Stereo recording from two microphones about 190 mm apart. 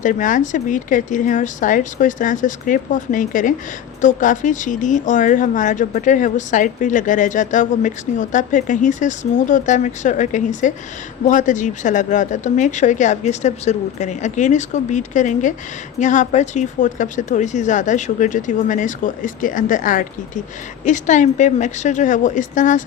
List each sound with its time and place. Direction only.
0.0 s speech: 45° left (ahead or behind)